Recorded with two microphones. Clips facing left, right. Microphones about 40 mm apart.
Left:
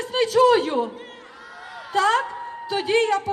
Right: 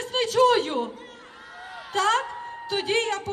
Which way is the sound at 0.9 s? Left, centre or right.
Left.